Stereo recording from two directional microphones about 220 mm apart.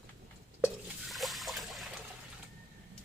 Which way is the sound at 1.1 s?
Centre (ahead or behind).